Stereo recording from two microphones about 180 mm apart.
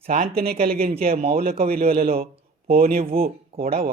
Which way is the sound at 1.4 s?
55° right (ahead or behind).